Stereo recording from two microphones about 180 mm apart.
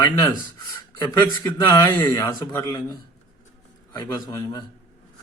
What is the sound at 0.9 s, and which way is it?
A man's voice, 20° left (ahead or behind).